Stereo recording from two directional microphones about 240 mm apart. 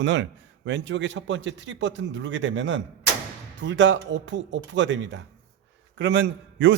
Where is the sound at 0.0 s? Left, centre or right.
Right.